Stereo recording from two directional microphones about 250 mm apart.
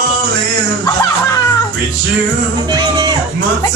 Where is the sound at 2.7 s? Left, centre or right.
Centre.